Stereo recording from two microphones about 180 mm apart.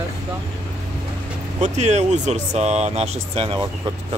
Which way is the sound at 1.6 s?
40° right (ahead or behind).